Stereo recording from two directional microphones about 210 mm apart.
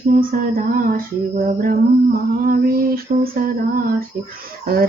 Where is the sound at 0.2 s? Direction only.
40° right (ahead or behind).